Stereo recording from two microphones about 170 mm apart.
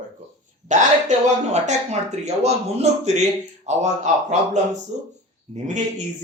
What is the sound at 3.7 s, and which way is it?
Speech, 40° right (ahead or behind).